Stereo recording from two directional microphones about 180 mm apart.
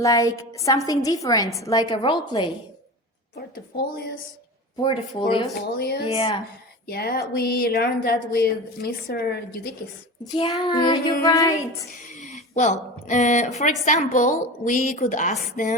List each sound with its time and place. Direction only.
0.0 s a woman's voice: 20° left (ahead or behind)
0.9 s child singing: 20° left (ahead or behind)
3.3 s a woman's voice: 60° left (ahead or behind)
4.8 s child singing: 25° left (ahead or behind)
5.7 s a woman's voice: 60° left (ahead or behind)
6.1 s child singing: 30° left (ahead or behind)
6.8 s a woman's voice: 60° left (ahead or behind)
10.3 s child singing: 25° left (ahead or behind)
12.2 s a woman's voice: 40° left (ahead or behind)